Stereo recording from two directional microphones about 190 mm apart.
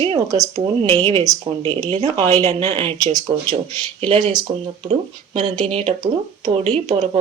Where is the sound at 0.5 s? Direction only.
30° right (ahead or behind).